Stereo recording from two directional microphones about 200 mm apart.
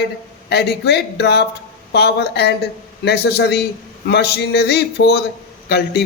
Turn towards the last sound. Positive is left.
turn(degrees=55)  # may be behind; listen again after turning